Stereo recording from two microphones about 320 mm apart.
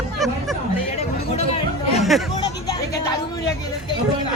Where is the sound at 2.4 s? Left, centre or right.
Centre.